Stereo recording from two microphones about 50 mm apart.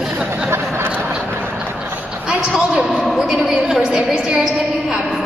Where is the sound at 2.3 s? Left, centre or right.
Centre.